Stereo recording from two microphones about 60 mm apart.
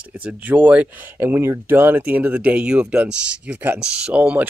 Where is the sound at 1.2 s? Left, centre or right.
Right.